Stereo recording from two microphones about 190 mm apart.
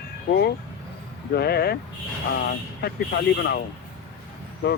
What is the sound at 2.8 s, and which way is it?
Speech, 60° left (ahead or behind).